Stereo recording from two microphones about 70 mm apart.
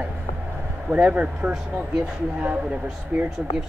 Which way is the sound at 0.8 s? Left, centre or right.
Right.